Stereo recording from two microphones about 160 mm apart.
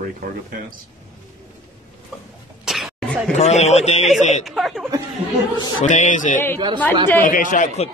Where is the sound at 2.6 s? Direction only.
Centre (ahead or behind).